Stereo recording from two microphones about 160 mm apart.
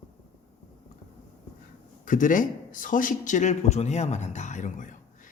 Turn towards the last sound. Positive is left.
turn(degrees=50)  # may be behind; listen again after turning